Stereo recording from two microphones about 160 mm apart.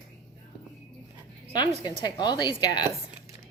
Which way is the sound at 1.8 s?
25° left (ahead or behind).